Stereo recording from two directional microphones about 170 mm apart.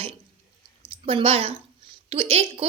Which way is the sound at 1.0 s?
35° right (ahead or behind).